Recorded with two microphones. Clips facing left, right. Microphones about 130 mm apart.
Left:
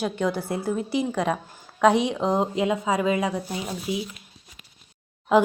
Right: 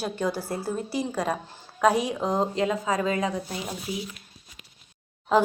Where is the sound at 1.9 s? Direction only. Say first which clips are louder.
Left 3 dB; 25° left (ahead or behind).